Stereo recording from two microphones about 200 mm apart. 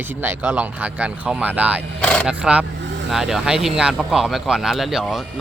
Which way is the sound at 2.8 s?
65° right (ahead or behind).